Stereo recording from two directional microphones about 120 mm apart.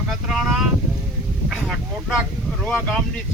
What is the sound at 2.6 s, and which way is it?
Speech, 5° left (ahead or behind).